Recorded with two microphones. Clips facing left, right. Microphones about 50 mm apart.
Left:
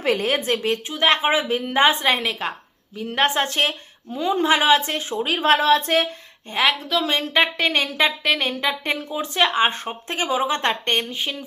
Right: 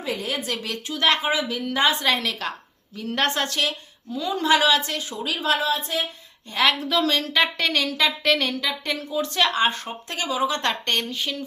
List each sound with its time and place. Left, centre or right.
0.0 s a woman's voice: left
5.5 s speech: left
6.7 s a woman's voice: centre
7.0 s speech: left
7.5 s speech: centre
7.8 s speech: left
8.2 s speech: centre
8.4 s speech: left